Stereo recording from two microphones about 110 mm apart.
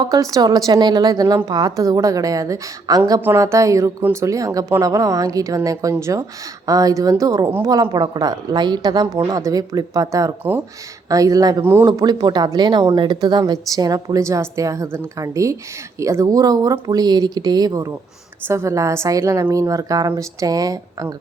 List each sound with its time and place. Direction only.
0.0 s a woman's voice: 30° right (ahead or behind)
11.6 s a woman's voice: 20° right (ahead or behind)
11.9 s a woman's voice: 35° right (ahead or behind)